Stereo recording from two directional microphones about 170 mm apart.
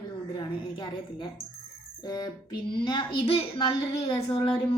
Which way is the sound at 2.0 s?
20° left (ahead or behind).